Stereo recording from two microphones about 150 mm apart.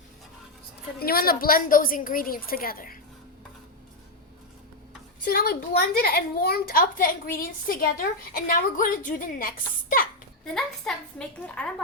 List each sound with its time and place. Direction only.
0.9 s a woman's voice: 85° left; by 3.0 s 70° left (ahead or behind)
5.2 s a woman's voice: 85° left; by 9.5 s 65° left (ahead or behind)
10.4 s a woman's voice: 5° left (ahead or behind)